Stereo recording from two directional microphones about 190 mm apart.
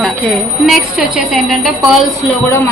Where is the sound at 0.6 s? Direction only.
Centre (ahead or behind).